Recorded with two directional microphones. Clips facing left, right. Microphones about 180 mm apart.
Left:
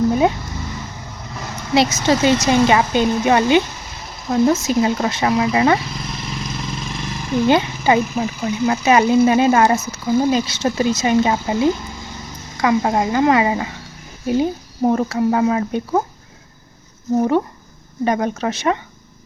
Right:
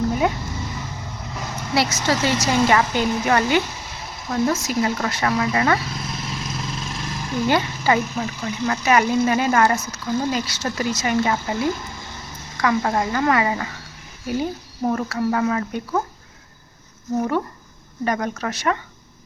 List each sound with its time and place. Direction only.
1.7 s a woman's voice: 20° left (ahead or behind)
5.9 s vehicle: centre (ahead or behind)
7.4 s a woman's voice: 20° left (ahead or behind)
10.3 s a woman's voice: 25° left (ahead or behind)
17.2 s a woman's voice: 25° left (ahead or behind)